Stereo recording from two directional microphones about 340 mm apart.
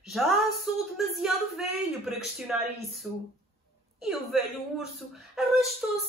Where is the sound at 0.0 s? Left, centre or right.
Centre.